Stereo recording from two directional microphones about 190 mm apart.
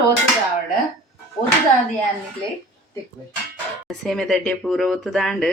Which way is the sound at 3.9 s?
Centre (ahead or behind).